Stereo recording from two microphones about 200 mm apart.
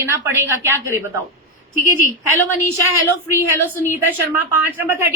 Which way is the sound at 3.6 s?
10° left (ahead or behind).